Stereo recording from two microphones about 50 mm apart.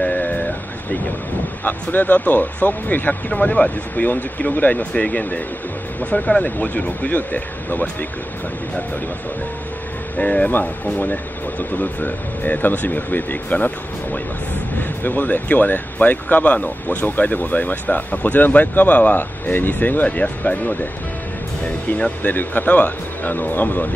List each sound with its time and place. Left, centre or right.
0.0 s vehicle: left
1.6 s speech: left
3.3 s speech: left
10.1 s speech: left
22.2 s speech: left